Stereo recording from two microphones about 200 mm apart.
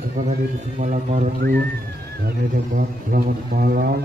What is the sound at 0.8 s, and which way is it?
Speech, 35° right (ahead or behind).